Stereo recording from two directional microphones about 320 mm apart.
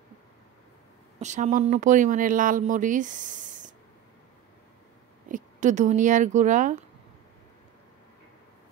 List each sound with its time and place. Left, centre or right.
1.2 s speech: right
5.3 s speech: right